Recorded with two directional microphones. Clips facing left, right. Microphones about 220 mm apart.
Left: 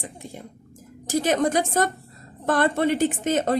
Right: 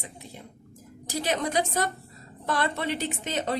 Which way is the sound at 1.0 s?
45° left (ahead or behind).